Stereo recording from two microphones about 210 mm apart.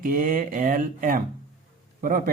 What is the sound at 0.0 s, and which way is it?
Speech, 40° right (ahead or behind).